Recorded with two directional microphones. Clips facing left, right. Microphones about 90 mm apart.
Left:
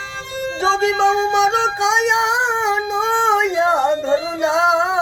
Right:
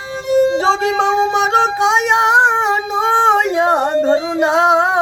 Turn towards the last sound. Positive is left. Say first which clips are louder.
# right 3 dB
turn(degrees=-50)  # may be behind; listen again after turning